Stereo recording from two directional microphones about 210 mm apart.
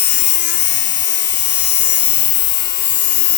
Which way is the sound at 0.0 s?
55° left (ahead or behind).